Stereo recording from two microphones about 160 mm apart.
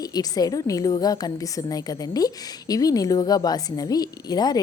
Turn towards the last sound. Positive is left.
turn(degrees=25)  # may be behind; listen again after turning